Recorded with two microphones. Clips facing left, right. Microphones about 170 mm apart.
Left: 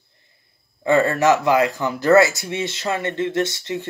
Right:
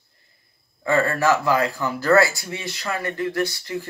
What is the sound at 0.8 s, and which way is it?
Speech, 20° left (ahead or behind).